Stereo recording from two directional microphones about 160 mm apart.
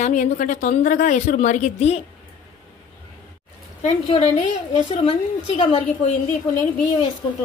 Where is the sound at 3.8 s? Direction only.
40° left (ahead or behind).